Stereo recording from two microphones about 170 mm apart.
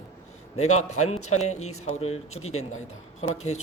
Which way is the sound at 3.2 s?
40° left (ahead or behind).